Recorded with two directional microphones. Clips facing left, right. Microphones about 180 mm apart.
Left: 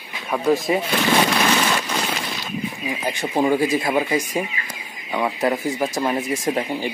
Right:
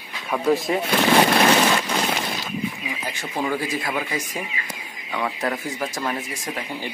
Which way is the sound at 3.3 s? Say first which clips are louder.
Left 7 dB; 25° left (ahead or behind).